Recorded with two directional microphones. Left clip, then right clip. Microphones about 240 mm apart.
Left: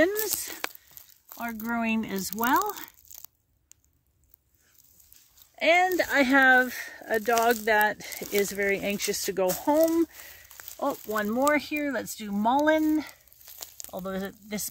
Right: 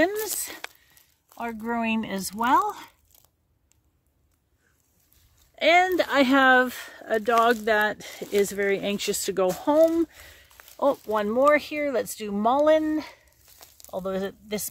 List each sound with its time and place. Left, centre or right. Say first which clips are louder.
0.0 s a sound: right 1 dB; centre
1.4 s speech: right 2 dB; centre
3.1 s a sound: left 10 dB; left
5.6 s speech: right 3 dB; centre
13.5 s crumpling: left 5 dB; left
13.8 s speech: right 5 dB; centre